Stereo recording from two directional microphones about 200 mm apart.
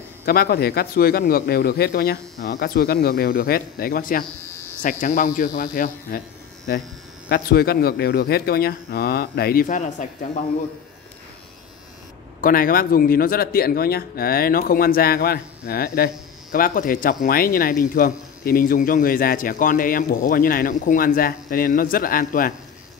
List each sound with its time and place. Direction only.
0.2 s speech: 50° left (ahead or behind)
4.4 s electric shaver: 10° left (ahead or behind)
4.8 s speech: 40° left (ahead or behind)
12.4 s speech: 45° left (ahead or behind)